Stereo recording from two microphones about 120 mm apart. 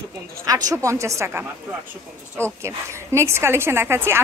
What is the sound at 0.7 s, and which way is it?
Speech, 25° right (ahead or behind).